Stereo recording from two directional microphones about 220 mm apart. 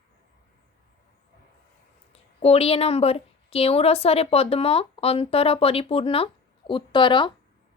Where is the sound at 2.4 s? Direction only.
25° left (ahead or behind).